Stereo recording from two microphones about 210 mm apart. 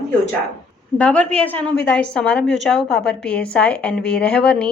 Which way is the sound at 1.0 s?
5° left (ahead or behind).